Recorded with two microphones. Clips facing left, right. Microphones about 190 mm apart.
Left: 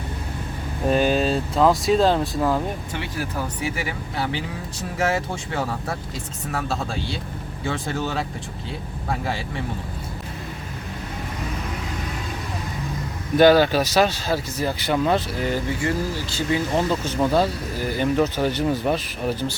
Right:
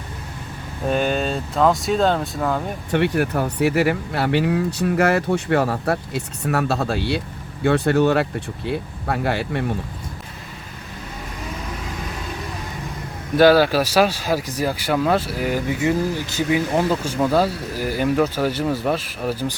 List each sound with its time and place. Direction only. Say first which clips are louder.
0.9 s speech: left 1 dB; centre (ahead or behind)
2.9 s speech: right 9 dB; 65° right (ahead or behind)
13.3 s speech: right 1 dB; 5° right (ahead or behind)